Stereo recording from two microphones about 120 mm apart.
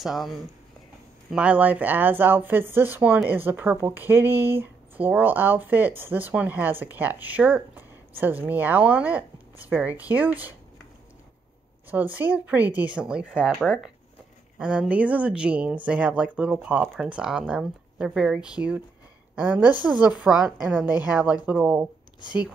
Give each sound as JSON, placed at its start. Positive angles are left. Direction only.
{"t": 0.0, "sound": "speech", "side_deg": 0}
{"t": 1.3, "sound": "speech", "side_deg": -10}
{"t": 11.9, "sound": "speech", "side_deg": -15}